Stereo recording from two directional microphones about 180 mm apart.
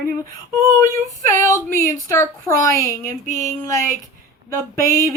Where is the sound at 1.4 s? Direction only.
15° left (ahead or behind).